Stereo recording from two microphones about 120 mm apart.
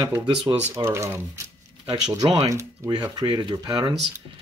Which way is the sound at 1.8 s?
35° right (ahead or behind).